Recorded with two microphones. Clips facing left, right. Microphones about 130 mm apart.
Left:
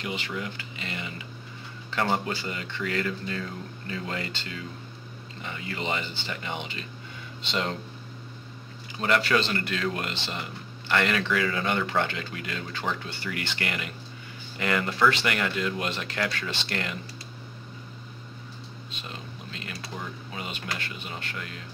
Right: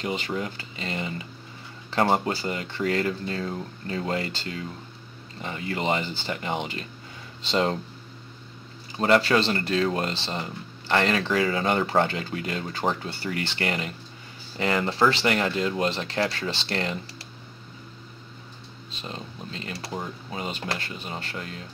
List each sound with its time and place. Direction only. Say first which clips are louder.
0.0 s speech: right 4 dB; 35° right (ahead or behind)
8.9 s speech: right 4 dB; 35° right (ahead or behind)
18.9 s speech: right 5 dB; 35° right (ahead or behind)